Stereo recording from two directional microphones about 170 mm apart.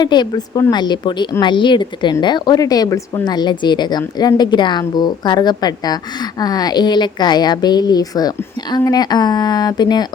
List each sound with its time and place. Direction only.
0.0 s speech: 25° left (ahead or behind)